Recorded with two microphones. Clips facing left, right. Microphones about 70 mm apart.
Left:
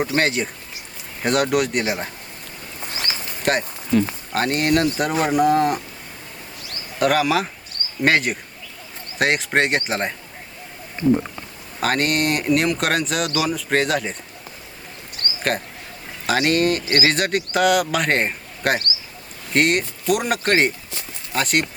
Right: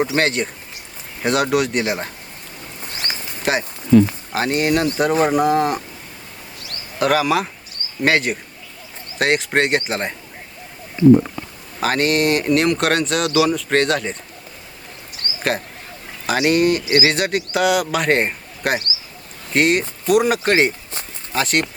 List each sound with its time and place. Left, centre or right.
0.0 s speech: centre
3.1 s a sound: centre
4.3 s speech: centre
7.0 s speech: centre
11.0 s speech: left
11.8 s speech: centre
16.2 s speech: centre